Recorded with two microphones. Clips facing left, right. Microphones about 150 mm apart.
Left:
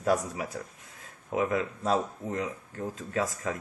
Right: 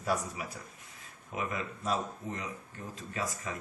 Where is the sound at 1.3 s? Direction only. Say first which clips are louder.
Left 8 dB; 65° left (ahead or behind).